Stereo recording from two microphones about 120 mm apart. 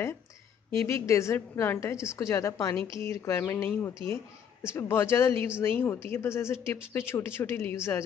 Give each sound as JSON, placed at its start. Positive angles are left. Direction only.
{"t": 0.7, "sound": "speech", "side_deg": 20}